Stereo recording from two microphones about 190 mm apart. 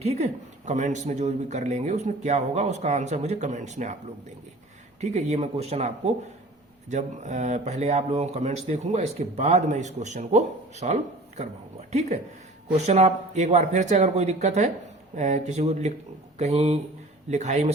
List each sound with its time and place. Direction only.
0.0 s speech: 35° right (ahead or behind)
4.9 s speech: 35° right (ahead or behind)
6.9 s speech: 40° right (ahead or behind)